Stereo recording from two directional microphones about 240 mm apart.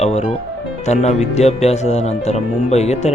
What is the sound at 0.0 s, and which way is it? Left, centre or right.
Music, left.